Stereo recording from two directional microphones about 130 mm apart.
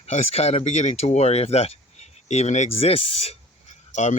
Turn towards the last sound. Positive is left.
turn(degrees=65)  # may be behind; listen again after turning